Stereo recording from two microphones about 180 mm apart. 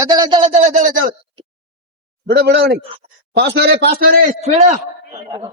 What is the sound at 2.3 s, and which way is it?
A man's voice, 60° right (ahead or behind).